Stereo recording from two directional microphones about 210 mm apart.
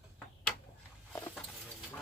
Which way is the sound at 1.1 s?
5° left (ahead or behind).